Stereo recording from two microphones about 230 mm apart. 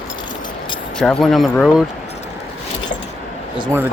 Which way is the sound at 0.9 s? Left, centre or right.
Centre.